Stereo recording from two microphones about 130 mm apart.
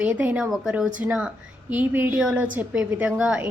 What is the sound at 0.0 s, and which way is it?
A woman's voice, 10° right (ahead or behind).